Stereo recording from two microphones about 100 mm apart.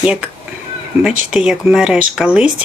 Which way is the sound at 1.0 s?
10° right (ahead or behind).